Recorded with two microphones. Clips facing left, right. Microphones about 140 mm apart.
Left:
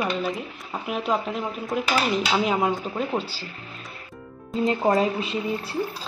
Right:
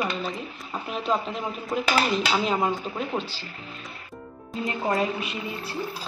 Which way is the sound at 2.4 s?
10° left (ahead or behind).